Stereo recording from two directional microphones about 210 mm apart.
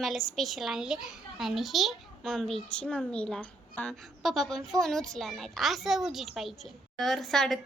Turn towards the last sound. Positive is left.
turn(degrees=0)  # may be behind; listen again after turning